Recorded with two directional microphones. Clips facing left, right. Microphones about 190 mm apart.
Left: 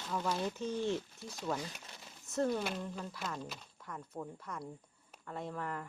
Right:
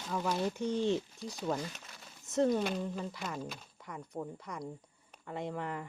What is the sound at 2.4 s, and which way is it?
Speech, 15° right (ahead or behind).